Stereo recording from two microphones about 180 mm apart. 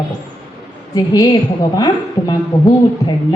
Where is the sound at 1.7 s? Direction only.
25° left (ahead or behind).